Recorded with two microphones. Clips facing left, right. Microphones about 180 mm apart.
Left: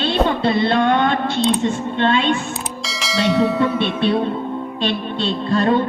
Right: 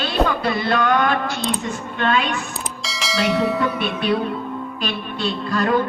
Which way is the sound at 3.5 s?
25° left (ahead or behind).